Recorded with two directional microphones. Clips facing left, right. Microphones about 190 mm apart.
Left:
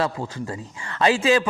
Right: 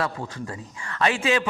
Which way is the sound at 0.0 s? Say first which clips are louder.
Left 3 dB; 30° left (ahead or behind).